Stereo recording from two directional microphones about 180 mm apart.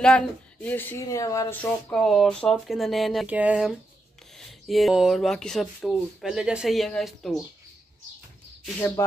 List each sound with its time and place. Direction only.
0.0 s speech: 5° left (ahead or behind)
1.6 s speech: 5° left (ahead or behind)
8.7 s speech: 15° left (ahead or behind)